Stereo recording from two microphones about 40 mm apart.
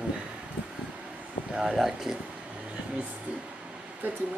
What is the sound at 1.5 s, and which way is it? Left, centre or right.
Speech, centre.